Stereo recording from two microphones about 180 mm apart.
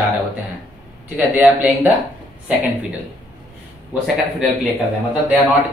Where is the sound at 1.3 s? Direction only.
10° right (ahead or behind).